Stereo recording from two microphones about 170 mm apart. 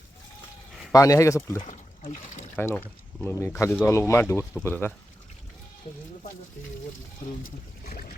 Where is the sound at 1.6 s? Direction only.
45° left (ahead or behind).